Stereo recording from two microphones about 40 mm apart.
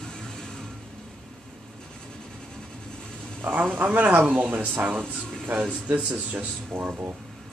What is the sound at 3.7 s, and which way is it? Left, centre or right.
Speech, right.